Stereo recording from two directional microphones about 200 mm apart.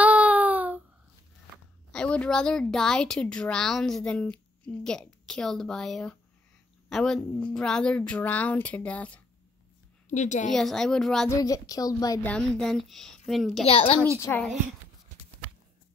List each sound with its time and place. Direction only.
0.0 s baby cry: 5° right (ahead or behind)
1.9 s a woman's voice: 5° left (ahead or behind)
10.0 s a woman's voice: 35° left (ahead or behind)
10.5 s a woman's voice: centre (ahead or behind)
11.2 s a woman's voice: 15° left (ahead or behind)
12.3 s a woman's voice: 5° left (ahead or behind)
13.7 s a woman's voice: 30° left (ahead or behind)
14.3 s a woman's voice: 10° left (ahead or behind)